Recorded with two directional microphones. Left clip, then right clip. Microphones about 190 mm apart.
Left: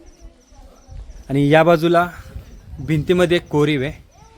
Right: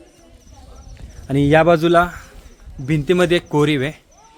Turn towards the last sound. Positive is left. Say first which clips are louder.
# right 1 dB
turn(degrees=-5)  # may be behind; listen again after turning